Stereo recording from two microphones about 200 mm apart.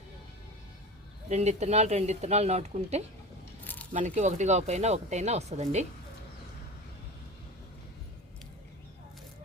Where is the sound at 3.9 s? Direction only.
35° right (ahead or behind).